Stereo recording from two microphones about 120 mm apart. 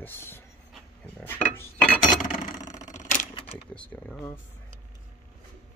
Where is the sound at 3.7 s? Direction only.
10° left (ahead or behind).